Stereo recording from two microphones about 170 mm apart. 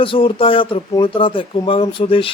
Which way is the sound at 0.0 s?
30° left (ahead or behind).